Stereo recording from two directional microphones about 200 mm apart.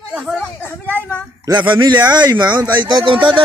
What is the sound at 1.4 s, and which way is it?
Speech, 10° right (ahead or behind).